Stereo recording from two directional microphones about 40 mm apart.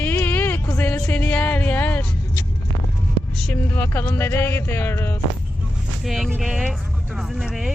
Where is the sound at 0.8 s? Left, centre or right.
Left.